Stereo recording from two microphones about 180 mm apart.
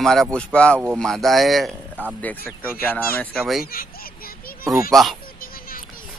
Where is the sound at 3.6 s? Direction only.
55° left (ahead or behind).